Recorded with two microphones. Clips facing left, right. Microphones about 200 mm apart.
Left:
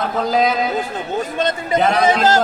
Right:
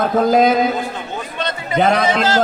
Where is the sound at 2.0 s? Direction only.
45° left (ahead or behind).